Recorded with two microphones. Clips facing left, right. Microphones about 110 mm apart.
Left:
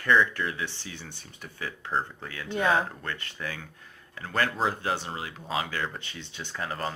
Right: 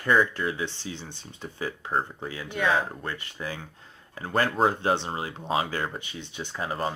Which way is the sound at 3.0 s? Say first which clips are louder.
Right 1 dB; 20° right (ahead or behind).